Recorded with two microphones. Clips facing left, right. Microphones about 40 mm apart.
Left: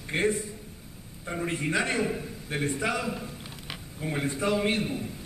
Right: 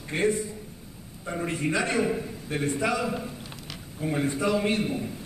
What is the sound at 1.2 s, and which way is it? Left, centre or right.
Speech, centre.